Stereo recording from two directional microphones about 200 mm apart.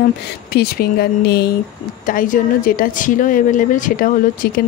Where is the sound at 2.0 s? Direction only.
40° left (ahead or behind).